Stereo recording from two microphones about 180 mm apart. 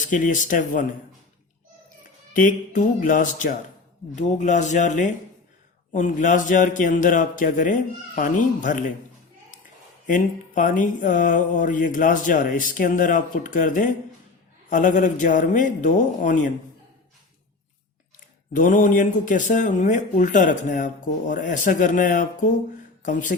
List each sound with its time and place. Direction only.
0.0 s speech: 45° left (ahead or behind)
2.3 s speech: 45° left (ahead or behind)
10.1 s speech: 45° left (ahead or behind)
18.5 s speech: 45° left (ahead or behind)